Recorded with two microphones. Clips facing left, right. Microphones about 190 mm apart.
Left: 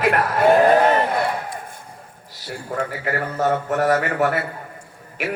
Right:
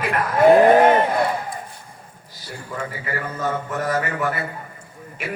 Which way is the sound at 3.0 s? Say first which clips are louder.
Left 4 dB; 70° left (ahead or behind).